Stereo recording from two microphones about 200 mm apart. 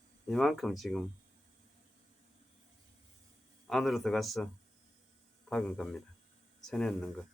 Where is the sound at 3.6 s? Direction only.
Centre (ahead or behind).